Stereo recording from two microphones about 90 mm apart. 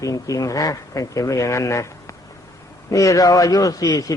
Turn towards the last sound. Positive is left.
turn(degrees=45)  # may be behind; listen again after turning